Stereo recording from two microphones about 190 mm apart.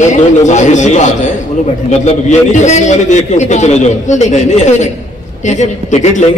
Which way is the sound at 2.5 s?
40° left (ahead or behind).